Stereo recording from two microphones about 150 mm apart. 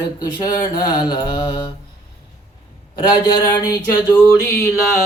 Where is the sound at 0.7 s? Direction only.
30° left (ahead or behind).